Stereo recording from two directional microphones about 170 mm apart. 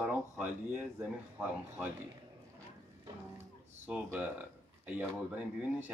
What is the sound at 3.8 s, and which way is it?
Speech, 10° right (ahead or behind).